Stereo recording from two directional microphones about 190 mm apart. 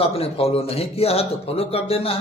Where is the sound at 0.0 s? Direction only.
30° left (ahead or behind).